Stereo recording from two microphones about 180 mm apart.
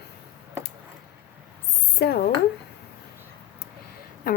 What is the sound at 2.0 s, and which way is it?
Speech, 65° left (ahead or behind).